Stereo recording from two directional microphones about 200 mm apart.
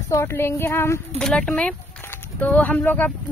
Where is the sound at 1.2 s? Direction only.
5° left (ahead or behind).